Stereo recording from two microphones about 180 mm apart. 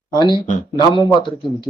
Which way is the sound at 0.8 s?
25° left (ahead or behind).